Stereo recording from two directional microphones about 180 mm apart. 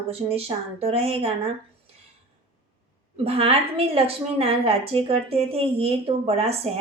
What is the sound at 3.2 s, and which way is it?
A woman's voice, 35° right (ahead or behind).